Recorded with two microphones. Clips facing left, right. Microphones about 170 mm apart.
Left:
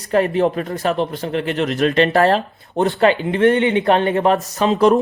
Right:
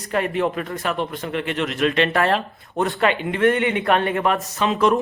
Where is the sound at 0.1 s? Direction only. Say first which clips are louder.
Left 5 dB; 35° left (ahead or behind).